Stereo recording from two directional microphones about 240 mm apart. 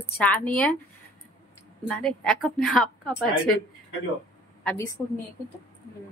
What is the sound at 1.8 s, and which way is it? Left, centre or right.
Speech, centre.